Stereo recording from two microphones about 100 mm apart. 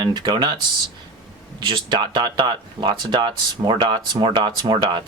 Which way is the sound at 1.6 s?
55° right (ahead or behind).